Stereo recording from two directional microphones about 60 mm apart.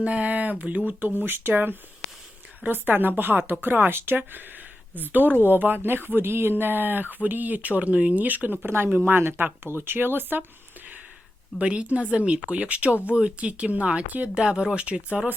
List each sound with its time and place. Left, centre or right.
0.0 s speech: right
11.6 s speech: centre